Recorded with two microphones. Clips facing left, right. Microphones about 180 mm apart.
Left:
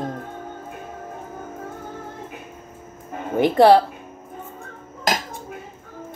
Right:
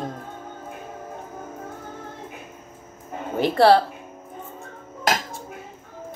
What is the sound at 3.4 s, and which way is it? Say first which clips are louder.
Speech: left 3 dB; 15° left (ahead or behind).